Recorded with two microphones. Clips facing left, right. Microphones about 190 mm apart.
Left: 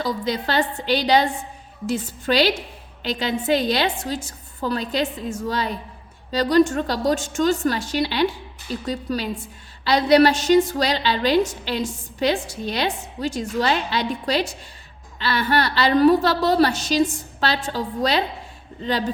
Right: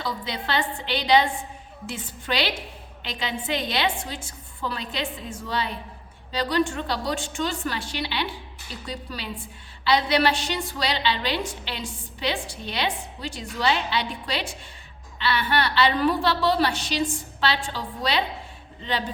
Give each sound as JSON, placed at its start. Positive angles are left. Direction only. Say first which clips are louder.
{"t": 0.0, "sound": "a woman's voice", "louder": "left 7 dB", "side_deg": 40}